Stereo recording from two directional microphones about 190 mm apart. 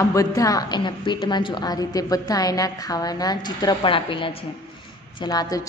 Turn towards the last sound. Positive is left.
turn(degrees=20)  # may be behind; listen again after turning